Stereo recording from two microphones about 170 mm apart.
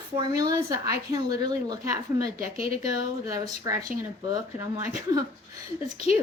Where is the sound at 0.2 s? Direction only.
20° right (ahead or behind).